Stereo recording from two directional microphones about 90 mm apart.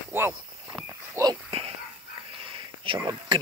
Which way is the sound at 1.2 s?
35° right (ahead or behind).